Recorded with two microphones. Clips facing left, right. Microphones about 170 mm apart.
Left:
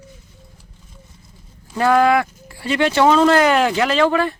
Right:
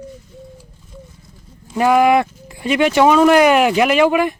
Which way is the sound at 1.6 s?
15° right (ahead or behind).